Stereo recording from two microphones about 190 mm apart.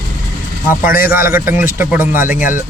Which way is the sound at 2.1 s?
45° left (ahead or behind).